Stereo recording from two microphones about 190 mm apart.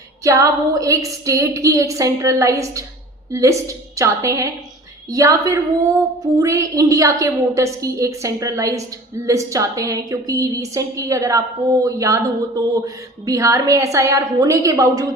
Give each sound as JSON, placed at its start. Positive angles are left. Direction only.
{"t": 0.3, "sound": "a woman's voice", "side_deg": -15}